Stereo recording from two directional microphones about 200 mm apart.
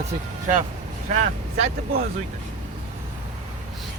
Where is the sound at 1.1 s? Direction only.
30° right (ahead or behind).